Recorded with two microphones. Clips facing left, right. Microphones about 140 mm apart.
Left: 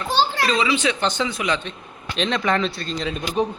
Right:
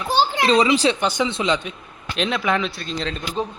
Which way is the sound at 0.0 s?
15° right (ahead or behind).